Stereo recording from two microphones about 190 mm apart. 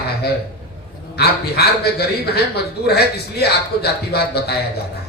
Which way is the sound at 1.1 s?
60° left (ahead or behind).